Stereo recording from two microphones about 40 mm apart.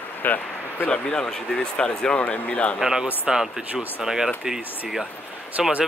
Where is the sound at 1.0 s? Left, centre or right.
Centre.